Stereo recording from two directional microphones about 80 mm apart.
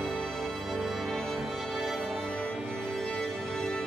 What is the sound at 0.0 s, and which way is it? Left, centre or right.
Music, centre.